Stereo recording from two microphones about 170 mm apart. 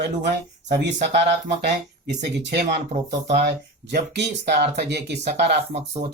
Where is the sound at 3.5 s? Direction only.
80° right.